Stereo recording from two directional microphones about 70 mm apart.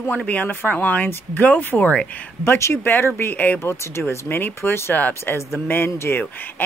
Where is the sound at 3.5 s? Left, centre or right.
Left.